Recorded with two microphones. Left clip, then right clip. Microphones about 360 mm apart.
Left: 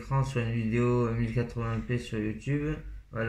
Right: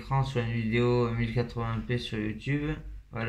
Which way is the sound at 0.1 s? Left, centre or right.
Centre.